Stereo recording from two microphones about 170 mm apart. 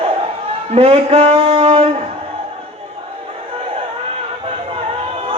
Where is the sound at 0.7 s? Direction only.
35° right (ahead or behind).